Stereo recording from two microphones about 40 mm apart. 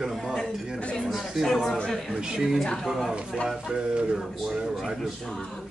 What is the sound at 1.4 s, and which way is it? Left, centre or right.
Speech, centre.